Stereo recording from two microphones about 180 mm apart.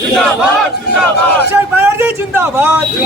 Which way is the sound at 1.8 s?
10° right (ahead or behind).